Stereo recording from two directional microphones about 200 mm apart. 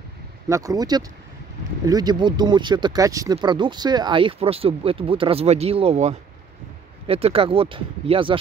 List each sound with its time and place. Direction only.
0.5 s speech: 15° right (ahead or behind)